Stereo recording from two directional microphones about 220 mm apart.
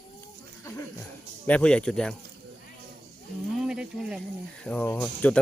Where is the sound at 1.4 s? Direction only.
5° left (ahead or behind).